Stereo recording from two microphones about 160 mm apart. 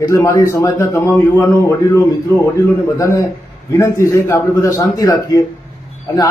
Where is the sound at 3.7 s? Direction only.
20° left (ahead or behind).